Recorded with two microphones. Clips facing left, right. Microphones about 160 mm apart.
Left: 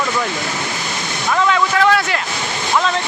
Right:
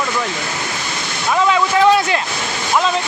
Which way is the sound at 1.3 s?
15° right (ahead or behind).